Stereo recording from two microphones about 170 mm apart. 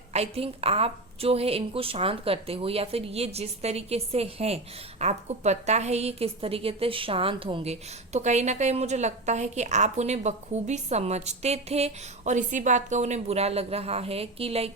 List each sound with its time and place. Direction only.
0.1 s a woman's voice: 35° right (ahead or behind)